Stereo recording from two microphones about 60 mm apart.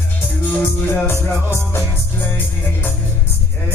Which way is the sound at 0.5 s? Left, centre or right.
Left.